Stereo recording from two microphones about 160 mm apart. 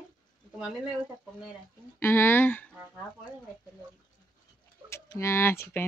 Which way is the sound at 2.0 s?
15° left (ahead or behind).